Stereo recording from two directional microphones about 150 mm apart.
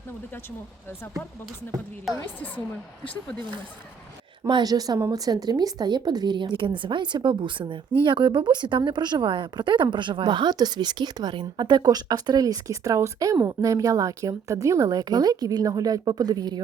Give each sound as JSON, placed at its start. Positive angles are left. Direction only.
{"t": 4.4, "sound": "speech", "side_deg": -30}